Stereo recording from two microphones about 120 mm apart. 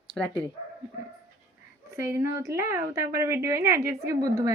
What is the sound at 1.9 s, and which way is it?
Speech, 20° right (ahead or behind).